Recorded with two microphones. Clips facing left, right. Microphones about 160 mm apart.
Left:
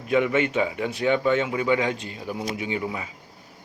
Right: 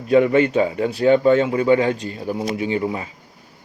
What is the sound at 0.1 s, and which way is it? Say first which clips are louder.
Speech: right 7 dB; 35° right (ahead or behind).